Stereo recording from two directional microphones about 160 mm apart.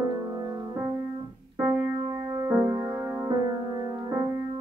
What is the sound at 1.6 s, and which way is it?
Music, 15° right (ahead or behind).